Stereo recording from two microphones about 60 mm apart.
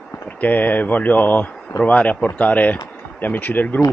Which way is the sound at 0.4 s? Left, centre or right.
Left.